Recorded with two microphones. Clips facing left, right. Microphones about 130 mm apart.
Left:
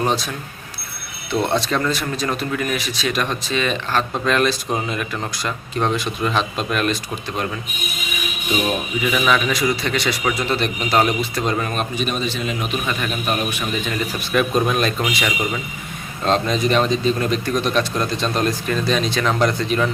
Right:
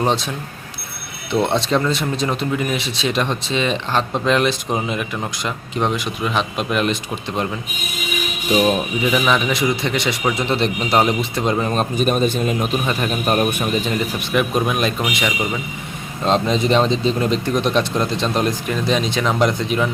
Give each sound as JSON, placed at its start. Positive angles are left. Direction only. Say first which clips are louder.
{"t": 0.0, "sound": "speech", "louder": "right 2 dB", "side_deg": -25}
{"t": 1.3, "sound": "speech", "louder": "right 2 dB", "side_deg": -20}
{"t": 8.6, "sound": "speech", "louder": "right 4 dB", "side_deg": -25}
{"t": 11.9, "sound": "a man's voice", "louder": "right 6 dB", "side_deg": -45}
{"t": 14.2, "sound": "a man's voice", "louder": "left 3 dB", "side_deg": -15}
{"t": 16.2, "sound": "speech", "louder": "right 1 dB", "side_deg": -20}